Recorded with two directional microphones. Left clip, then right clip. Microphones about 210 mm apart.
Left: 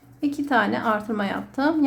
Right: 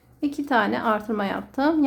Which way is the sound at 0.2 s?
10° right (ahead or behind).